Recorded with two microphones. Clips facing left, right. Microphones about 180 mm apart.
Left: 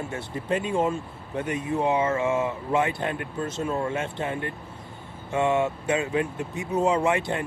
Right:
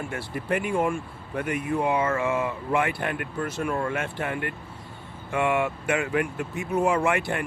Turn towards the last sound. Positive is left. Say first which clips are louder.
# left 1 dB
turn(degrees=20)  # may be behind; listen again after turning